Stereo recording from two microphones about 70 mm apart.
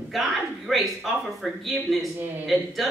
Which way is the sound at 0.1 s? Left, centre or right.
Centre.